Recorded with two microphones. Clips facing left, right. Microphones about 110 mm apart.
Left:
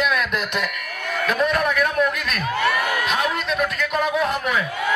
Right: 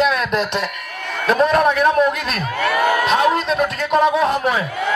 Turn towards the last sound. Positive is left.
turn(degrees=-30)  # may be behind; listen again after turning